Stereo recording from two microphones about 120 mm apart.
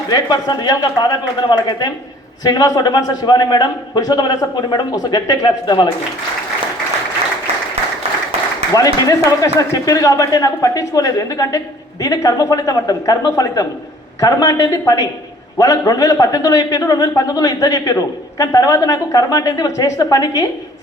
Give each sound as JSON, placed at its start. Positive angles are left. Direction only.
{"t": 0.1, "sound": "a man's voice", "side_deg": 35}
{"t": 8.7, "sound": "a man's voice", "side_deg": 30}